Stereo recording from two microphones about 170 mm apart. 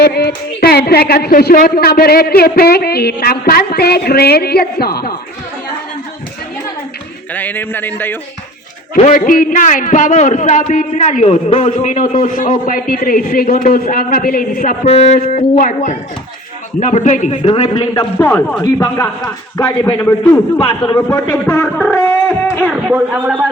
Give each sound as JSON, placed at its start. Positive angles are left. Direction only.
{"t": 0.0, "sound": "a woman's voice", "side_deg": 70}
{"t": 7.3, "sound": "speech", "side_deg": 10}
{"t": 9.1, "sound": "a man's voice", "side_deg": 55}
{"t": 14.8, "sound": "a man's voice", "side_deg": 40}
{"t": 17.5, "sound": "a man's voice", "side_deg": 25}
{"t": 17.9, "sound": "speech", "side_deg": 10}
{"t": 19.5, "sound": "a man's voice", "side_deg": 20}
{"t": 20.6, "sound": "a man's voice", "side_deg": 30}
{"t": 20.9, "sound": "a man's voice", "side_deg": 20}
{"t": 22.9, "sound": "speech", "side_deg": -5}